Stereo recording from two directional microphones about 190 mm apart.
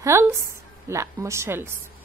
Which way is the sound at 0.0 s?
15° right (ahead or behind).